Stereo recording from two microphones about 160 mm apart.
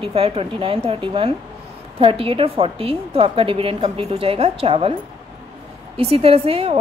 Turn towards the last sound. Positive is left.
turn(degrees=-35)  # may be behind; listen again after turning